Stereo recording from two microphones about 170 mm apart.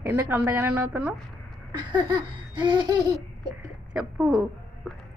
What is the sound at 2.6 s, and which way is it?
Laughter, 25° right (ahead or behind).